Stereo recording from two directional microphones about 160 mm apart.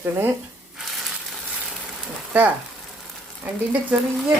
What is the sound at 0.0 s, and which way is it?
Speech, 15° right (ahead or behind).